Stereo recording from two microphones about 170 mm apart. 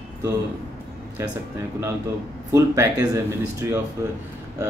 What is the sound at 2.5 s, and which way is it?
Speech, 15° right (ahead or behind).